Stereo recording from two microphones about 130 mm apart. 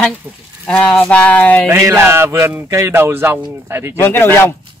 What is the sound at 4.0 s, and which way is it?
Speech, 15° left (ahead or behind).